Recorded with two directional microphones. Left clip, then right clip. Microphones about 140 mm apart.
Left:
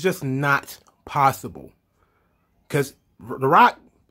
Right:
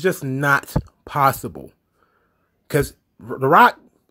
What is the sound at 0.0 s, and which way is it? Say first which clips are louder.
Speech: right 2 dB; 20° right (ahead or behind).